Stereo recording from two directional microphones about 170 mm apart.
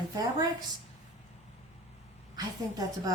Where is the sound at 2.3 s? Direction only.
20° right (ahead or behind).